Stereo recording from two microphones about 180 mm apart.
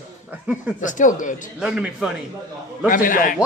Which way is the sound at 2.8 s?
50° left (ahead or behind).